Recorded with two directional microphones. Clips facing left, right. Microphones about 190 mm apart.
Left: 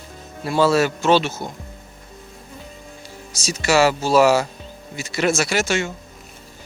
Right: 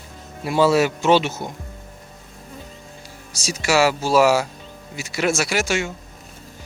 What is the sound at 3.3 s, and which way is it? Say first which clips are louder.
Speech: left 1 dB; 10° right (ahead or behind).